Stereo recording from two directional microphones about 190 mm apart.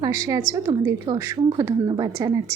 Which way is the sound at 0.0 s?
15° right (ahead or behind).